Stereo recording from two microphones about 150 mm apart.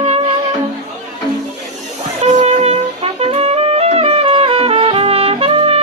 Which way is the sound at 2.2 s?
45° right (ahead or behind).